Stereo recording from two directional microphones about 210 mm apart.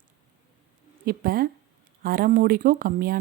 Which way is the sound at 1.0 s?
45° right (ahead or behind).